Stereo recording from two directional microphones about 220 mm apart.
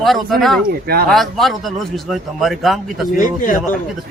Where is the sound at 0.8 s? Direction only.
45° right (ahead or behind).